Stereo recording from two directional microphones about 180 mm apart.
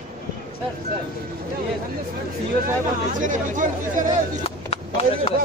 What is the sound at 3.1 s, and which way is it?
Speech, 45° right (ahead or behind).